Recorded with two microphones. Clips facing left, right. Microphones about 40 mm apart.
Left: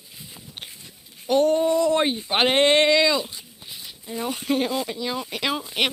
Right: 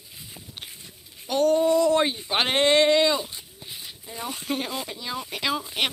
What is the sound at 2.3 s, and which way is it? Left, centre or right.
Speech, centre.